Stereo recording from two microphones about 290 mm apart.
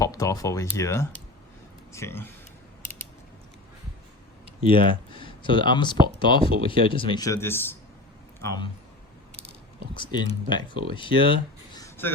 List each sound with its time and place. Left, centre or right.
0.0 s speech: centre
4.6 s speech: centre
9.9 s speech: centre